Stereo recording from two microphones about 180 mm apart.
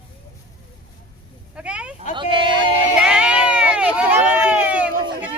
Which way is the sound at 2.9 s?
5° right (ahead or behind).